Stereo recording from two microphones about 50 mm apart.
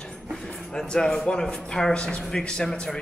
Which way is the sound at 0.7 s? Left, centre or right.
Centre.